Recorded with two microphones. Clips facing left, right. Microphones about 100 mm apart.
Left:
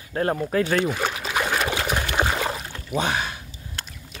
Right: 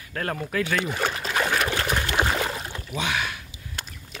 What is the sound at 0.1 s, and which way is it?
Speech, 25° left (ahead or behind).